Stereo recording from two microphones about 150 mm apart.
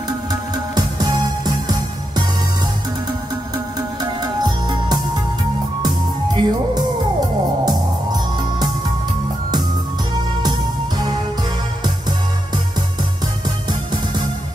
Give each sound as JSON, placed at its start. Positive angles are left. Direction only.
{"t": 0.3, "sound": "music", "side_deg": -25}
{"t": 3.5, "sound": "music", "side_deg": -25}
{"t": 6.3, "sound": "music", "side_deg": -30}